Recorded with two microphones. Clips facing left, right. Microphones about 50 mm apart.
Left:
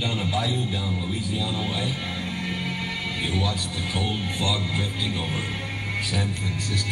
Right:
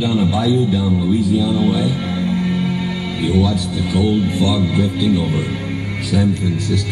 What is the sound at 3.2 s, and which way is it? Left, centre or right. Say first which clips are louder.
A man's voice: right 13 dB; left.